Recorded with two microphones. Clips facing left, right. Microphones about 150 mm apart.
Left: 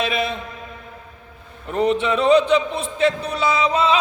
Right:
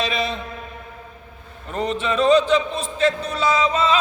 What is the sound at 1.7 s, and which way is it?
Speech, 15° left (ahead or behind).